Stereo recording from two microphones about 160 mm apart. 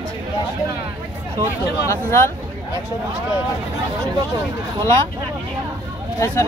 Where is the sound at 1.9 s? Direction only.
15° left (ahead or behind).